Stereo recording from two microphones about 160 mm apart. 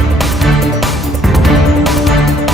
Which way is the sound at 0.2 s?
Centre (ahead or behind).